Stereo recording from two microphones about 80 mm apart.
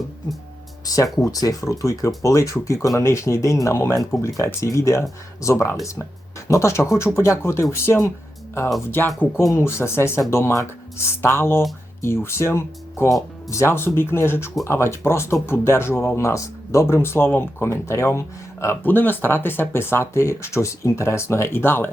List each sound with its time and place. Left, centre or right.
1.1 s speech: left
9.4 s speech: left
18.9 s speech: left